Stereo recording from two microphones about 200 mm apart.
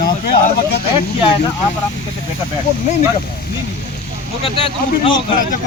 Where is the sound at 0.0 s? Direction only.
45° left (ahead or behind).